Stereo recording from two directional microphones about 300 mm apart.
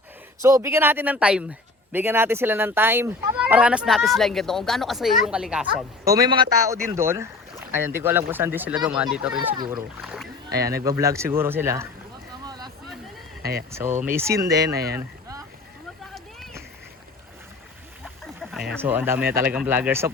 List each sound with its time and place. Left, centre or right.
0.4 s speech: centre
6.1 s speech: centre
10.8 s speech: centre
12.5 s a sound: centre
13.4 s speech: right
13.7 s speech: centre
14.7 s speech: right
14.9 s boat: centre
16.1 s a sound: centre
18.8 s speech: centre